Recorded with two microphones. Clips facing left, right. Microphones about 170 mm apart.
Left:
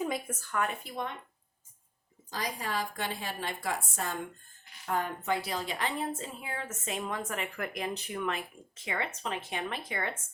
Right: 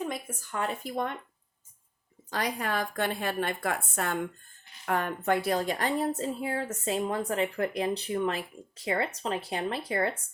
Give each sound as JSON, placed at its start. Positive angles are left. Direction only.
{"t": 0.3, "sound": "a woman's voice", "side_deg": -15}
{"t": 0.5, "sound": "speech", "side_deg": -30}
{"t": 0.9, "sound": "speech", "side_deg": -50}
{"t": 2.3, "sound": "a woman's voice", "side_deg": -60}